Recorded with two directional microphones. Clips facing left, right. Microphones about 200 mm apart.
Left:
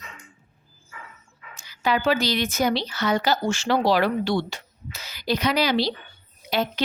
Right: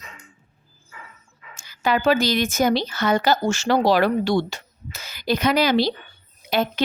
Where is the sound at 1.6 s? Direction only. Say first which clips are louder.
Right 2 dB; 45° right (ahead or behind).